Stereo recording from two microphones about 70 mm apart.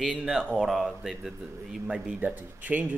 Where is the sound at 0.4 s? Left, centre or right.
Centre.